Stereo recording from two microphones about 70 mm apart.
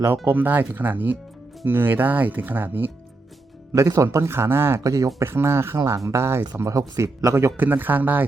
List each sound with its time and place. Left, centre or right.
0.3 s speech: right
3.7 s speech: right
4.8 s a man's voice: right
5.2 s speech: right
6.7 s a man's voice: right
7.5 s speech: right